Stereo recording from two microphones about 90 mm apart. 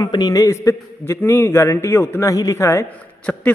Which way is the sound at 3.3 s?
15° left (ahead or behind).